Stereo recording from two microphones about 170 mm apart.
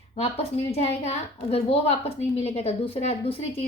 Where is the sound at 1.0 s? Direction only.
40° left (ahead or behind).